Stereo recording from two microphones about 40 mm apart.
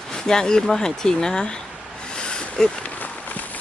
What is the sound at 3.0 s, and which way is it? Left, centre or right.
Run, left.